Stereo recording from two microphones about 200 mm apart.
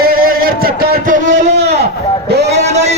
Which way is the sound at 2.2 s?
55° right (ahead or behind).